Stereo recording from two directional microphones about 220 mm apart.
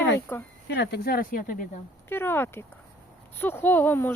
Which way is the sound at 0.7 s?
45° left (ahead or behind).